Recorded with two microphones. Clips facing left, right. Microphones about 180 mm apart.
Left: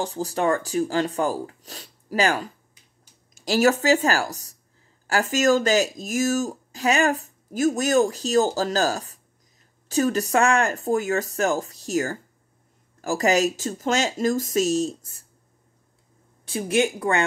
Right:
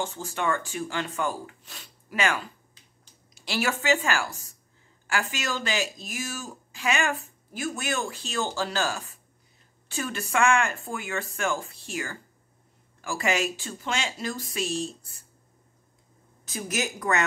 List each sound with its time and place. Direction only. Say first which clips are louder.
0.0 s speech: left 6 dB; 35° left (ahead or behind)
16.4 s speech: left 9 dB; 30° left (ahead or behind)